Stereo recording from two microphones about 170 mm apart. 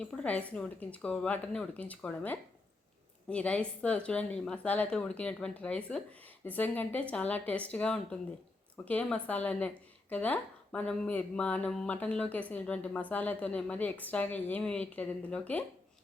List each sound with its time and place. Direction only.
0.0 s speech: 5° left (ahead or behind)